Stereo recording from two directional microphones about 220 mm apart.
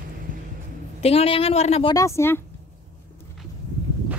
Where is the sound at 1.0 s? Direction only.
25° left (ahead or behind).